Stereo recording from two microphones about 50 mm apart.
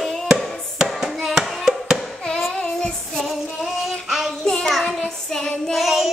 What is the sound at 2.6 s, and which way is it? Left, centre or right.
Child singing, centre.